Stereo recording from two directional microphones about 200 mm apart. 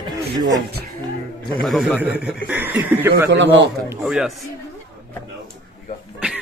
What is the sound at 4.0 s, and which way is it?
Speech, 5° right (ahead or behind).